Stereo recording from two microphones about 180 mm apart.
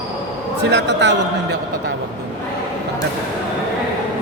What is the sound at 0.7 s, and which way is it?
Speech, 75° right (ahead or behind).